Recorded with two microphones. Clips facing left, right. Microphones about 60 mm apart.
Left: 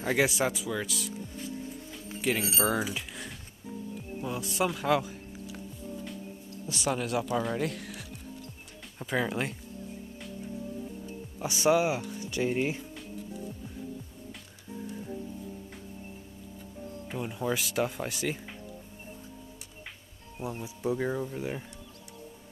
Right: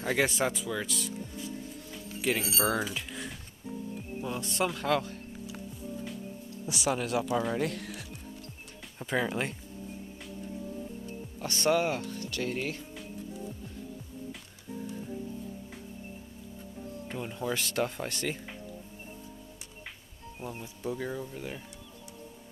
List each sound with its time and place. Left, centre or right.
0.0 s speech: centre
2.3 s speech: centre
6.7 s speech: centre
11.3 s speech: centre
17.1 s speech: centre
20.6 s speech: centre